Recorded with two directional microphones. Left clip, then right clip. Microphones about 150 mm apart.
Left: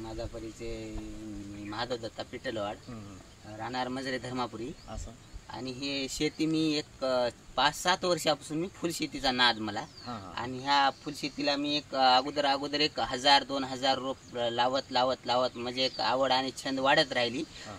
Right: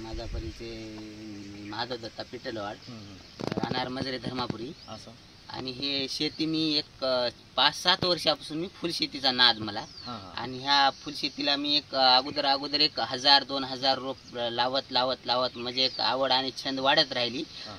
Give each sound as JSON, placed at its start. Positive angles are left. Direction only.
{"t": 1.7, "sound": "speech", "side_deg": 15}
{"t": 5.5, "sound": "speech", "side_deg": 15}